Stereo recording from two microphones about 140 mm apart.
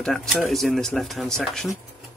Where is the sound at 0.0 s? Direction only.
5° left (ahead or behind).